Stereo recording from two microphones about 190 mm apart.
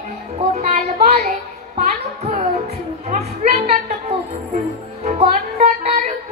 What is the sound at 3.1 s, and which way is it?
Music, 35° right (ahead or behind).